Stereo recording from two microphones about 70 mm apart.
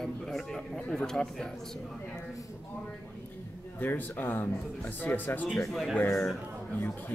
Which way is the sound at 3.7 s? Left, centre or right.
Left.